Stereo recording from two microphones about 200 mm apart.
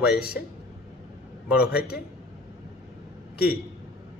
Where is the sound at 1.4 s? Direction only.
5° right (ahead or behind).